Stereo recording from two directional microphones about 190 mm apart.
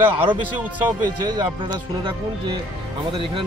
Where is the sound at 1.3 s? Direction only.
25° right (ahead or behind).